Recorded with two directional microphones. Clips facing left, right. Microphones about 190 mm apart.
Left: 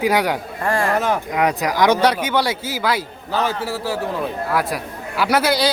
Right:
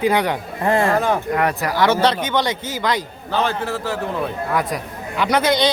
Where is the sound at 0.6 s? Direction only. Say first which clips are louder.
Right 4 dB; 20° right (ahead or behind).